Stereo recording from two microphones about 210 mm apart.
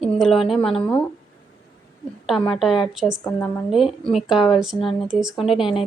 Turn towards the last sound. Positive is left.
turn(degrees=0)  # may be behind; listen again after turning